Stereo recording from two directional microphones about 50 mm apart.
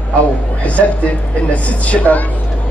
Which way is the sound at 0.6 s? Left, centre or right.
Left.